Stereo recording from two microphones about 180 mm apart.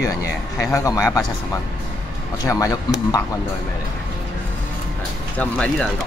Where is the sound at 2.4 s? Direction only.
20° left (ahead or behind).